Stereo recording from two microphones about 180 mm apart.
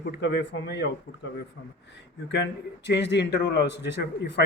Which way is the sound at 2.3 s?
75° left (ahead or behind).